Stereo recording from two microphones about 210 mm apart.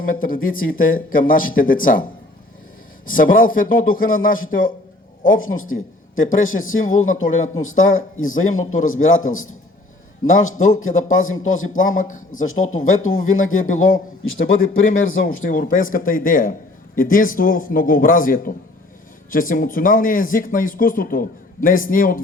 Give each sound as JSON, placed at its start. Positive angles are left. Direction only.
{"t": 0.0, "sound": "a man's voice", "side_deg": 40}
{"t": 3.1, "sound": "a man's voice", "side_deg": 40}
{"t": 5.2, "sound": "a man's voice", "side_deg": 70}
{"t": 11.9, "sound": "a man's voice", "side_deg": 40}
{"t": 12.3, "sound": "a man's voice", "side_deg": 75}
{"t": 15.4, "sound": "a man's voice", "side_deg": 40}